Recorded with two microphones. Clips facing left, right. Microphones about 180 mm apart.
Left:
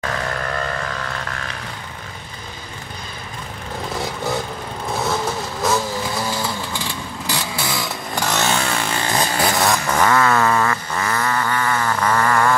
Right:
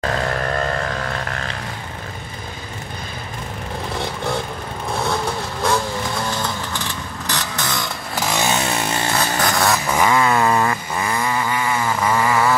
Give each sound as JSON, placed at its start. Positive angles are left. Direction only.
{"t": 3.9, "sound": "vehicle", "side_deg": 0}
{"t": 8.1, "sound": "chainsaw", "side_deg": -10}
{"t": 9.1, "sound": "vehicle", "side_deg": 10}
{"t": 9.9, "sound": "a sound", "side_deg": -15}